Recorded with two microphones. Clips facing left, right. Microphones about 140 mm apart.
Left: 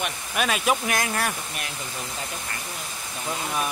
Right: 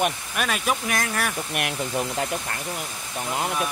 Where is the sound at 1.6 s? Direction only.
65° right (ahead or behind).